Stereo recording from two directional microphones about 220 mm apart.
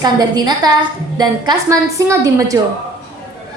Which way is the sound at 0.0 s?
20° right (ahead or behind).